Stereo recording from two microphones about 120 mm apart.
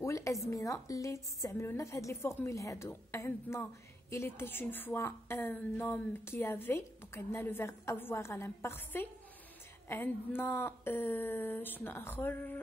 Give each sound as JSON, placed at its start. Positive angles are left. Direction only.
{"t": 0.0, "sound": "a woman's voice", "side_deg": 25}